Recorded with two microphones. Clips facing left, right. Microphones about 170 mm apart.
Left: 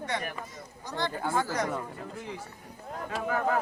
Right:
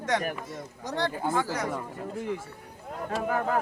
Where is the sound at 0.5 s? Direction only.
75° right (ahead or behind).